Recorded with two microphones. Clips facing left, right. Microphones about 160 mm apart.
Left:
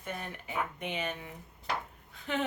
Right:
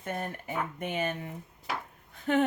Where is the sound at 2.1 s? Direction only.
50° right (ahead or behind).